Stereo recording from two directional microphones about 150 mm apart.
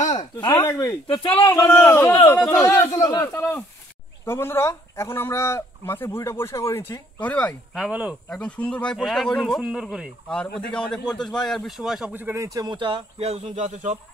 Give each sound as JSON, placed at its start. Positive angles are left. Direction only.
{"t": 0.5, "sound": "speech", "side_deg": 15}
{"t": 3.3, "sound": "speech", "side_deg": 15}
{"t": 7.7, "sound": "speech", "side_deg": -5}
{"t": 8.3, "sound": "speech", "side_deg": 10}
{"t": 10.2, "sound": "speech", "side_deg": 5}